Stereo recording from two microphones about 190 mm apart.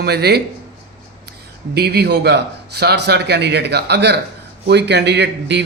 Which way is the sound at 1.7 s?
60° right (ahead or behind).